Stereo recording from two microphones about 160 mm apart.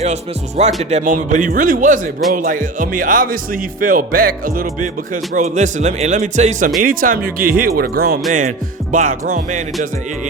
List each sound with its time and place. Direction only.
0.0 s speech: 45° right (ahead or behind)
6.7 s speech: 60° right (ahead or behind)
8.9 s speech: 55° right (ahead or behind)